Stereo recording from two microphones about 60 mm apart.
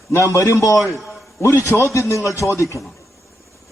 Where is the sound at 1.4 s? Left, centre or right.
Left.